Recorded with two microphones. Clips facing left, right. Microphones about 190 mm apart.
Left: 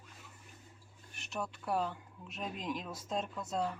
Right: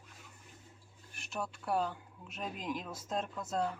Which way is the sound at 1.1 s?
Centre (ahead or behind).